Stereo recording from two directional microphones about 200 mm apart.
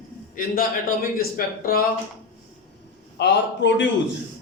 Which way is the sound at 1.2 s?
45° left (ahead or behind).